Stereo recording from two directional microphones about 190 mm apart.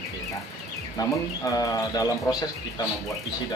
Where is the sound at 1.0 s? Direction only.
20° left (ahead or behind).